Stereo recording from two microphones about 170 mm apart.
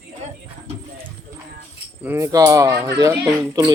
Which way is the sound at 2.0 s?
20° right (ahead or behind).